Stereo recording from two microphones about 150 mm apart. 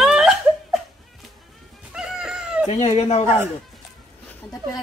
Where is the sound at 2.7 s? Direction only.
55° left (ahead or behind).